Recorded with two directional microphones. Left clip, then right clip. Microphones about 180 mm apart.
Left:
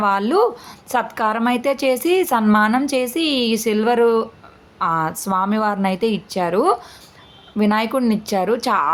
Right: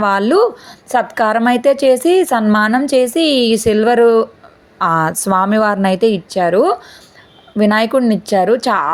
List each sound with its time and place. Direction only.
0.0 s a woman's voice: 25° right (ahead or behind)
4.8 s a woman's voice: 30° right (ahead or behind)